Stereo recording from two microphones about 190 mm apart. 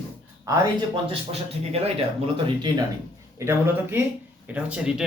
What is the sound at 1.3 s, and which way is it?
Speech, 30° right (ahead or behind).